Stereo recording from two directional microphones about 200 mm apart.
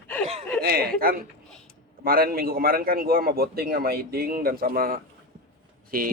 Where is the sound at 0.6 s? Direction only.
50° right (ahead or behind).